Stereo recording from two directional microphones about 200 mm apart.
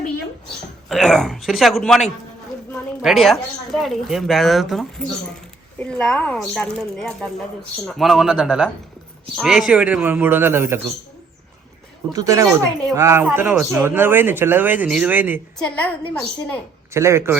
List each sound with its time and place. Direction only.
0.9 s speech: centre (ahead or behind)
12.1 s speech: 15° right (ahead or behind)
15.5 s speech: 5° left (ahead or behind)
16.9 s speech: 15° right (ahead or behind)